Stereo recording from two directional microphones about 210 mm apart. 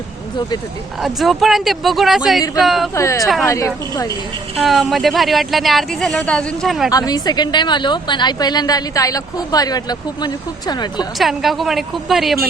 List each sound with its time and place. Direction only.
1.0 s speech: centre (ahead or behind)
2.9 s speech: 15° left (ahead or behind)
4.6 s speech: centre (ahead or behind)
6.9 s a woman's voice: 20° left (ahead or behind)
11.2 s speech: centre (ahead or behind)